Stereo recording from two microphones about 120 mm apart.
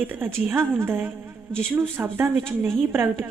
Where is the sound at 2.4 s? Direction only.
5° left (ahead or behind).